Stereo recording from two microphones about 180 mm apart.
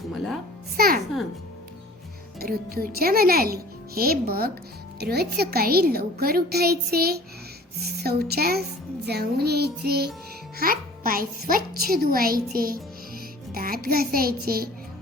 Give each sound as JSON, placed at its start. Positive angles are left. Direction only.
{"t": 0.8, "sound": "speech", "side_deg": -55}
{"t": 2.4, "sound": "a child's voice", "side_deg": -55}
{"t": 13.5, "sound": "music", "side_deg": -55}
{"t": 13.8, "sound": "speech", "side_deg": -55}